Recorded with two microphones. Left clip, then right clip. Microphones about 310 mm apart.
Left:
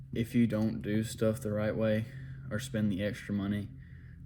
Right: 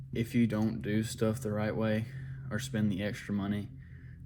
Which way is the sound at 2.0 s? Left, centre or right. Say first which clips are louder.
Even; centre.